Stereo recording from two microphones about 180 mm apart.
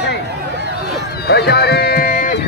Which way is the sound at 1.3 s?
65° left (ahead or behind).